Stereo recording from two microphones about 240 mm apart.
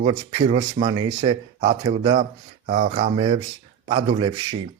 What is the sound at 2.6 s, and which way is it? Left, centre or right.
A man's voice, right.